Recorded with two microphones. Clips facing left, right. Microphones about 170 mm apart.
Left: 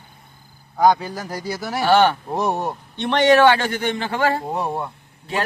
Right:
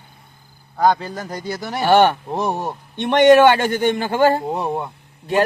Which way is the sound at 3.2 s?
45° right (ahead or behind).